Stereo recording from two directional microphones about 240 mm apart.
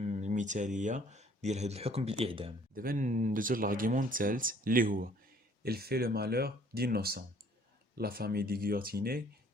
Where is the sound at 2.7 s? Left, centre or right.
Right.